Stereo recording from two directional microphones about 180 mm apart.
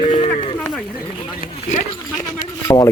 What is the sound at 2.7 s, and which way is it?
Speech, 15° left (ahead or behind).